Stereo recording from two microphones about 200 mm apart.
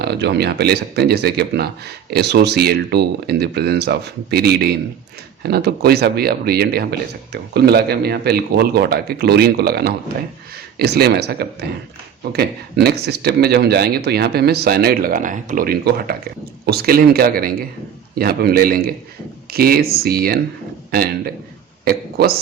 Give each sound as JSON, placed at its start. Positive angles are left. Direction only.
{"t": 0.0, "sound": "speech", "side_deg": -55}